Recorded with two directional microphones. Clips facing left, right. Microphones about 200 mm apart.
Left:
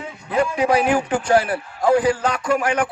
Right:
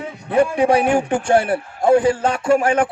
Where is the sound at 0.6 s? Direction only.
30° right (ahead or behind).